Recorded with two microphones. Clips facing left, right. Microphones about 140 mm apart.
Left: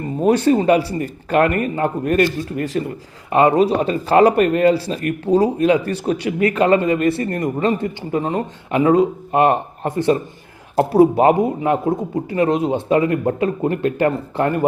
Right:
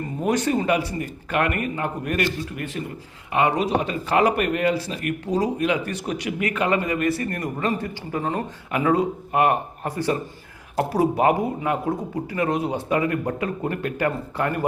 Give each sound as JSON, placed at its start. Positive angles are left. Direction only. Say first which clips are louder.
{"t": 0.2, "sound": "a man's voice", "louder": "left 7 dB", "side_deg": 30}